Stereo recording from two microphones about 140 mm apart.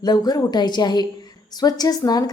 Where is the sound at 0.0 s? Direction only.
30° left (ahead or behind).